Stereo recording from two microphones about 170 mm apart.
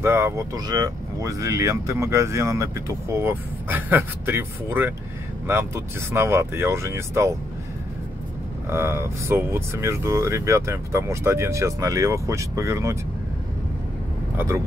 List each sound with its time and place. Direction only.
0.0 s speech: 15° right (ahead or behind)
8.6 s speech: 15° right (ahead or behind)
14.3 s speech: 15° right (ahead or behind)